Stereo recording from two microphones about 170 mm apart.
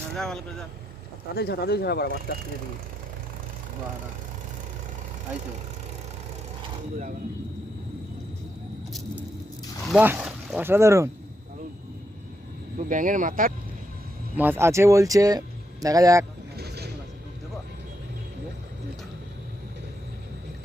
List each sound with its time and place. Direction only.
0.2 s speech: 5° left (ahead or behind)
1.4 s speech: 70° left (ahead or behind)
9.8 s speech: 5° right (ahead or behind)
12.7 s speech: 50° right (ahead or behind)
14.3 s speech: 10° right (ahead or behind)
16.6 s vehicle: 70° right (ahead or behind)